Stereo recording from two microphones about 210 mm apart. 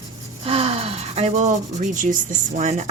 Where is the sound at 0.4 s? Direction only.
25° right (ahead or behind).